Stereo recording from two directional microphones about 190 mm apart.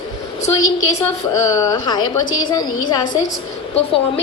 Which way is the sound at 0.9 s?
20° left (ahead or behind).